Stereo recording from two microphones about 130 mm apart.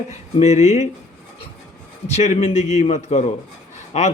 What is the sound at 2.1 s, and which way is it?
Speech, 55° left (ahead or behind).